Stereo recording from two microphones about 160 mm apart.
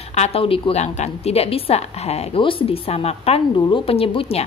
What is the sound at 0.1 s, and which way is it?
A woman's voice, 40° left (ahead or behind).